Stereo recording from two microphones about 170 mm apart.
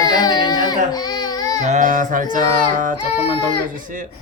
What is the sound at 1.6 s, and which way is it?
Speech, 45° right (ahead or behind).